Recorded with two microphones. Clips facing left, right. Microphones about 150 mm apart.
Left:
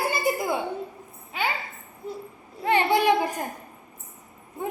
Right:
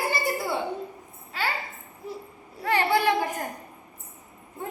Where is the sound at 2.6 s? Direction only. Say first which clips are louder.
Left 2 dB; 20° left (ahead or behind).